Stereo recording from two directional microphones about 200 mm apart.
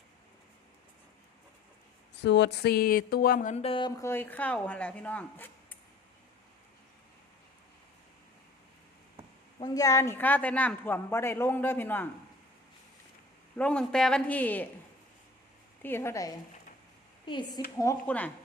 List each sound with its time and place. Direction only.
2.2 s a sound: 60° left (ahead or behind); by 5.7 s 5° left (ahead or behind)
9.6 s a woman's voice: 20° left (ahead or behind)
13.6 s a woman's voice: 5° left (ahead or behind)
15.8 s a woman's voice: 10° left (ahead or behind)
17.2 s a sound: 25° left (ahead or behind)
17.7 s a woman's voice: 10° left (ahead or behind)